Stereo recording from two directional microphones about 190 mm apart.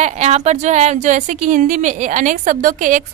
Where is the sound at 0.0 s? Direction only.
35° right (ahead or behind).